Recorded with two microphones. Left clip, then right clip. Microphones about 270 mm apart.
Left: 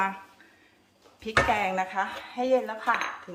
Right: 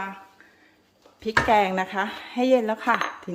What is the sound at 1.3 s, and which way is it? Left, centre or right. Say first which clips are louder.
Cutlery: right 4 dB; right.